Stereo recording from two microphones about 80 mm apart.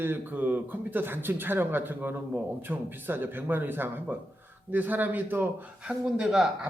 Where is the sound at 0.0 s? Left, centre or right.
Right.